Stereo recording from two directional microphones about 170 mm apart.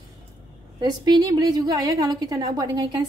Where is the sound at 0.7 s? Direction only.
25° right (ahead or behind).